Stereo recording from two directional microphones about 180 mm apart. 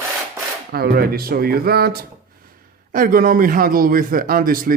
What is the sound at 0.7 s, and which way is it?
Speech, 60° right (ahead or behind).